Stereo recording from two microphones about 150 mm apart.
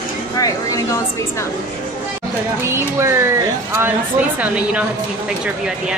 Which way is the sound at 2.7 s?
20° right (ahead or behind).